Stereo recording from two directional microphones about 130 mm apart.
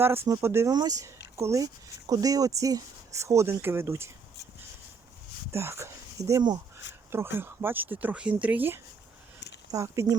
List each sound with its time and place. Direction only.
0.3 s speech: 20° right (ahead or behind)
5.5 s speech: 20° right (ahead or behind)